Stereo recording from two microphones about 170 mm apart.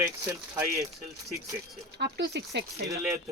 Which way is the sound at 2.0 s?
80° right.